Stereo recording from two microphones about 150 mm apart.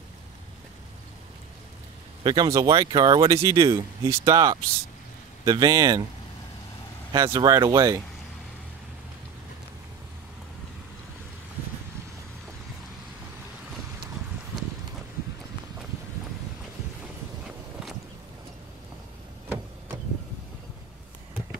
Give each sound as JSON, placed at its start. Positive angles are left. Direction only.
{"t": 2.2, "sound": "speech", "side_deg": -25}
{"t": 7.1, "sound": "speech", "side_deg": -25}